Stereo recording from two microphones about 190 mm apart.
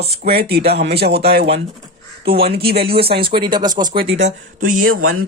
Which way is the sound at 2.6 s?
55° right (ahead or behind).